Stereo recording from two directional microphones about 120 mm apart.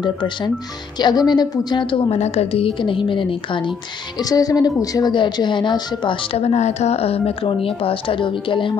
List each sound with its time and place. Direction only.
0.0 s a woman's voice: 40° left (ahead or behind)
2.1 s a woman's voice: 65° left (ahead or behind); by 3.7 s 45° left (ahead or behind)
4.2 s a woman's voice: 30° left (ahead or behind)
6.4 s a woman's voice: 70° left (ahead or behind); by 8.7 s 45° left (ahead or behind)